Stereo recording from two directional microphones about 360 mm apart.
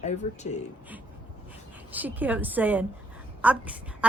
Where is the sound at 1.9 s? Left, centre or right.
Centre.